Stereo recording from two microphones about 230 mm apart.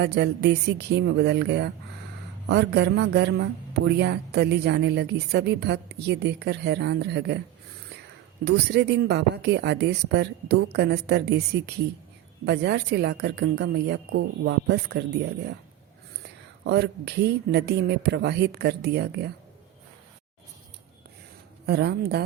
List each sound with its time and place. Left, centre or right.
0.0 s a woman's voice: right
8.4 s a woman's voice: right
16.6 s a woman's voice: right
21.7 s a woman's voice: right